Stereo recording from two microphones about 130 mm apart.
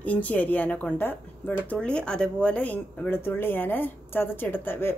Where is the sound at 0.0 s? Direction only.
10° left (ahead or behind).